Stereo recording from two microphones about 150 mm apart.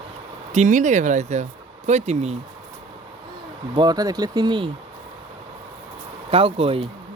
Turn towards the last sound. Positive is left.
turn(degrees=-40)  # may be behind; listen again after turning